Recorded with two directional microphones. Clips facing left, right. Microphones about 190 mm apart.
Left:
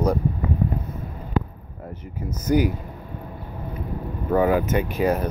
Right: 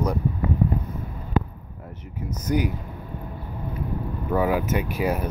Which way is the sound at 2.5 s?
Centre (ahead or behind).